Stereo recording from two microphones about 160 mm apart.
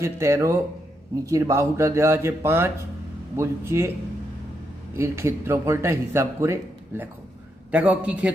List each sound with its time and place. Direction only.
0.0 s speech: 15° right (ahead or behind)
4.9 s speech: 15° right (ahead or behind)